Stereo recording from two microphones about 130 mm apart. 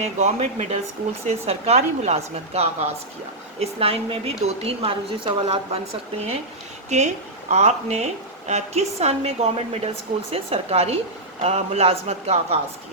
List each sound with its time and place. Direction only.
0.0 s a woman's voice: 60° right (ahead or behind)